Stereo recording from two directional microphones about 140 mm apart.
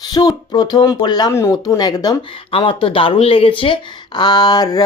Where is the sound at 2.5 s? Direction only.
40° left (ahead or behind).